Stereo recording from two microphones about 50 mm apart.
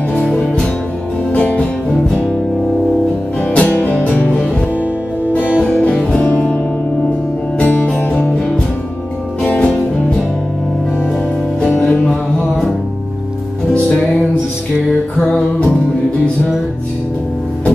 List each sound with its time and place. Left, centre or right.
1.3 s music: left
3.3 s music: left
5.7 s music: centre
11.7 s music: left
15.1 s music: left